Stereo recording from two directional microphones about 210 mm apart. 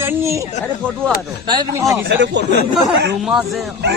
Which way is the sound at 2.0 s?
55° right (ahead or behind).